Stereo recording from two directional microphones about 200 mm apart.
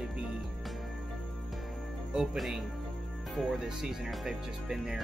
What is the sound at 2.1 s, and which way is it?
Speech, centre (ahead or behind).